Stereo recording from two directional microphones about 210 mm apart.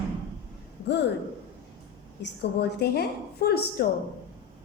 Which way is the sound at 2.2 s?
50° left (ahead or behind).